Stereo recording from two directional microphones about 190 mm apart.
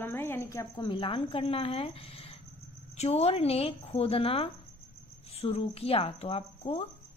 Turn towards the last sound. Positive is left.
turn(degrees=30)  # may be behind; listen again after turning